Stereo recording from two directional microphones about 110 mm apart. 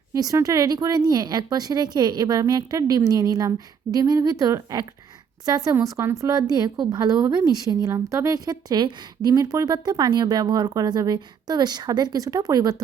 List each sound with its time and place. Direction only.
0.1 s a woman's voice: 30° right (ahead or behind)